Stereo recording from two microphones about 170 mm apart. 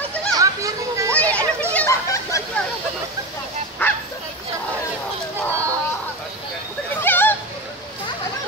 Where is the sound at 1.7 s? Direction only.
20° left (ahead or behind).